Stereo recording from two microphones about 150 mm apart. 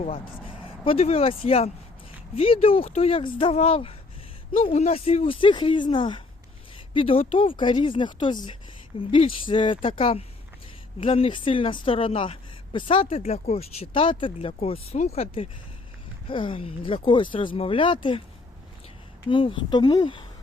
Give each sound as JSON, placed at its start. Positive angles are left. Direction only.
{"t": 0.0, "sound": "a woman's voice", "side_deg": 40}
{"t": 19.3, "sound": "a woman's voice", "side_deg": 35}